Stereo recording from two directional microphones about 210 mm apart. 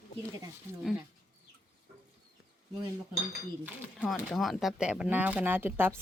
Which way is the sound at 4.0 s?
Centre (ahead or behind).